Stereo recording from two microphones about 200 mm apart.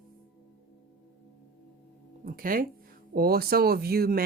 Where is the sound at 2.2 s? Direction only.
45° right (ahead or behind).